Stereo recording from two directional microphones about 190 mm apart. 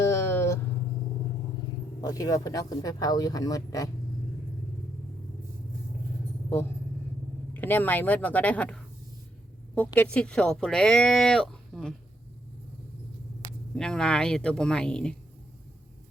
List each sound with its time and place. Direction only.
0.0 s vehicle: 15° left (ahead or behind)
2.0 s speech: 20° left (ahead or behind)
7.5 s speech: 10° left (ahead or behind)
13.7 s speech: 5° left (ahead or behind)